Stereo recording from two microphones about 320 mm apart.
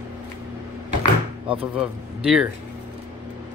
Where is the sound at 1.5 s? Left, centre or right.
Centre.